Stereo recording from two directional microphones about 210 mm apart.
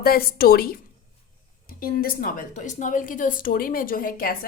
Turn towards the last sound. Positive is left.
turn(degrees=45)  # may be behind; listen again after turning